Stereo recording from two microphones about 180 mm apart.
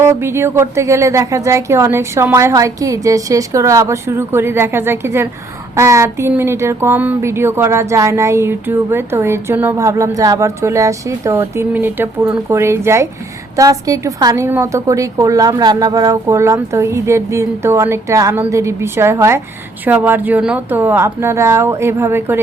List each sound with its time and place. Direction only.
0.0 s speech: 15° right (ahead or behind)